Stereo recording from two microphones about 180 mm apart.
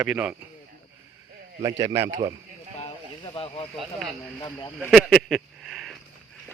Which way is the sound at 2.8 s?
30° left (ahead or behind).